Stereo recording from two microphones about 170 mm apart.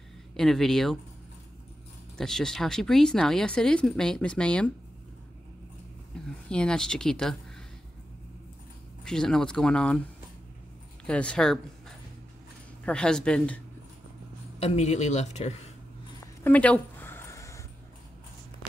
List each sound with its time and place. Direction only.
0.4 s speech: centre (ahead or behind)
2.1 s speech: 5° left (ahead or behind)
6.5 s speech: 5° left (ahead or behind)
9.0 s speech: 5° left (ahead or behind)
11.1 s speech: 5° left (ahead or behind)
12.8 s speech: 5° left (ahead or behind)
14.6 s speech: 40° left (ahead or behind)
16.4 s a sound: 10° left (ahead or behind)